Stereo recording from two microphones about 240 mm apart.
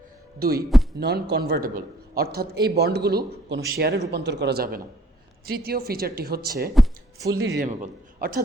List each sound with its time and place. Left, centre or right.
0.3 s a man's voice: right
6.8 s speech: centre
7.3 s a man's voice: right